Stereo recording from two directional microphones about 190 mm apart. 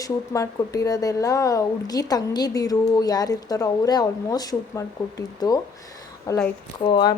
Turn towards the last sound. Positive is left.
turn(degrees=25)  # may be behind; listen again after turning